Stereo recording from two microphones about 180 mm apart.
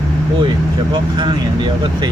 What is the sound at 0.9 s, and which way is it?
Speech, 25° right (ahead or behind).